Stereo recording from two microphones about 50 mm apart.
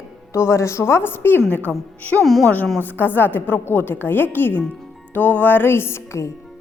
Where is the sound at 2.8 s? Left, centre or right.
Left.